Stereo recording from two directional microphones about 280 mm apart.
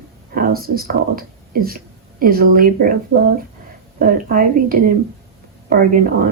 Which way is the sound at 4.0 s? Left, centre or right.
Right.